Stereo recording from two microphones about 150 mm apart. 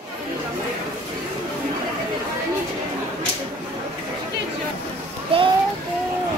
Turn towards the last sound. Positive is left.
turn(degrees=-35)  # may be behind; listen again after turning